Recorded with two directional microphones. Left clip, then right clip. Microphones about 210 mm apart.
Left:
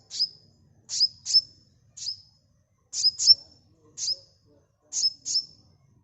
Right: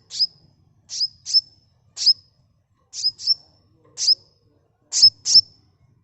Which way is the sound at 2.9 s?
15° right (ahead or behind).